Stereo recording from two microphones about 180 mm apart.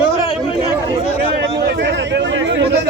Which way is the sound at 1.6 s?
70° right (ahead or behind).